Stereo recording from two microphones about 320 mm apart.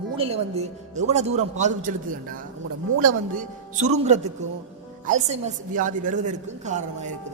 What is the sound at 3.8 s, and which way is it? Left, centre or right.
A woman's voice, right.